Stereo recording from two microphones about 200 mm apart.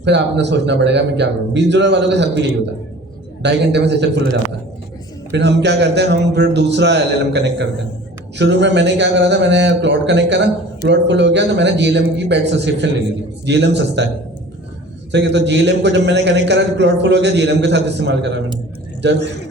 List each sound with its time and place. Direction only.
0.0 s a man's voice: 60° right (ahead or behind)
5.3 s a man's voice: 60° right (ahead or behind)
15.1 s a man's voice: 60° right (ahead or behind)